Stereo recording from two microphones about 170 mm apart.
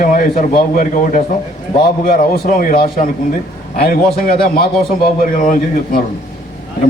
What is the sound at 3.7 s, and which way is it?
Speech, 65° left (ahead or behind).